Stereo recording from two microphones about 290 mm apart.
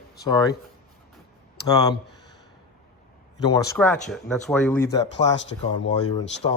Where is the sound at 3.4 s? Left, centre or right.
Centre.